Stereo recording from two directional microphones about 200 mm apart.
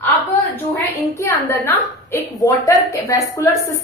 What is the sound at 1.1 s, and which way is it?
A woman's voice, 15° left (ahead or behind).